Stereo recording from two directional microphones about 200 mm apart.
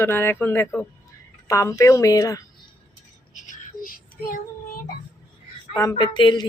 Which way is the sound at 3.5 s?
45° left (ahead or behind).